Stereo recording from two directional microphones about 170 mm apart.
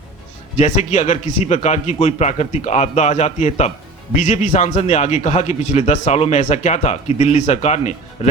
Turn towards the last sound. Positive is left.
turn(degrees=40)  # may be behind; listen again after turning